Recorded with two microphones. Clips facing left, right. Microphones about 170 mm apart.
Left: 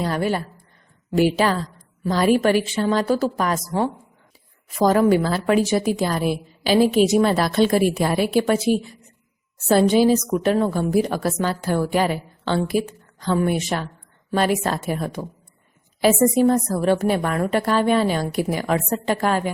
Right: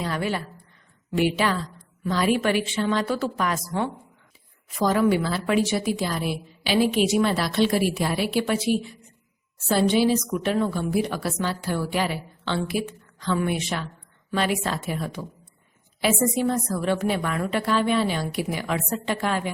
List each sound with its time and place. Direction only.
0.0 s a woman's voice: 40° left (ahead or behind)